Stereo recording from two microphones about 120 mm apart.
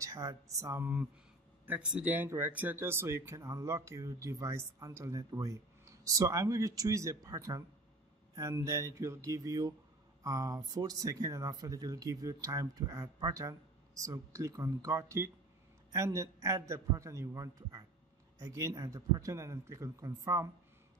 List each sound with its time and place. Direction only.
0.0 s speech: 30° right (ahead or behind)
1.7 s speech: 10° right (ahead or behind); by 20.4 s 25° right (ahead or behind)